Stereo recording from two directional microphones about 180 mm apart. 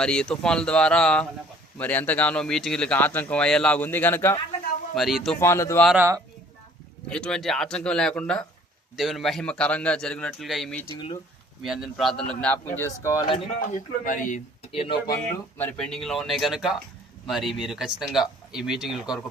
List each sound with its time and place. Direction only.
0.0 s speech: 5° left (ahead or behind)
4.9 s speech: centre (ahead or behind)
5.4 s speech: 15° left (ahead or behind)
6.0 s speech: 15° right (ahead or behind)
7.1 s speech: 5° left (ahead or behind)
10.9 s speech: 25° left (ahead or behind)
11.6 s speech: centre (ahead or behind); by 13.2 s 15° left (ahead or behind)
14.0 s speech: 45° left (ahead or behind)
14.7 s speech: 30° left (ahead or behind)
15.5 s speech: 10° left (ahead or behind)